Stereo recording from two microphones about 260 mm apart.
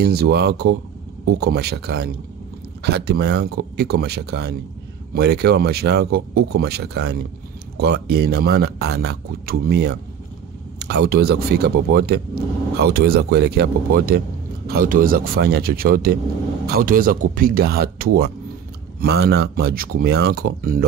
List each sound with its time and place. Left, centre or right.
0.0 s speech: right